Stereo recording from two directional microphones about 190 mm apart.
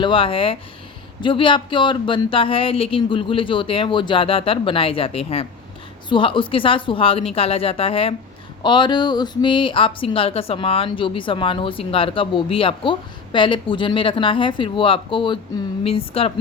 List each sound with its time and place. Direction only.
0.0 s a woman's voice: 30° left (ahead or behind)